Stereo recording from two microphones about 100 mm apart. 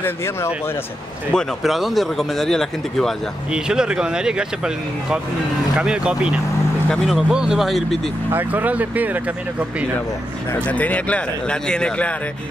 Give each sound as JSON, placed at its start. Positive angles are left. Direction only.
{"t": 1.3, "sound": "speech", "side_deg": 0}
{"t": 3.5, "sound": "speech", "side_deg": -5}
{"t": 8.3, "sound": "speech", "side_deg": -20}
{"t": 10.5, "sound": "speech", "side_deg": 15}